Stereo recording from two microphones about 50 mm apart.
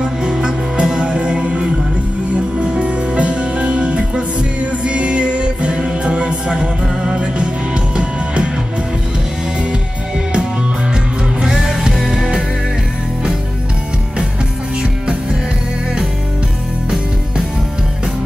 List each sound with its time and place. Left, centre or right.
0.0 s music: centre
11.4 s music: centre